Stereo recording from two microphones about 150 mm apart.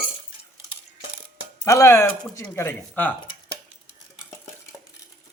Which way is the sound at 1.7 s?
20° left (ahead or behind).